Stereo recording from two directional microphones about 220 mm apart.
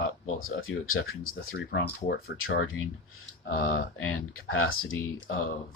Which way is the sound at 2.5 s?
55° left (ahead or behind).